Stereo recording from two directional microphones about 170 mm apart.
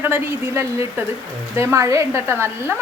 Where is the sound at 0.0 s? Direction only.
15° right (ahead or behind).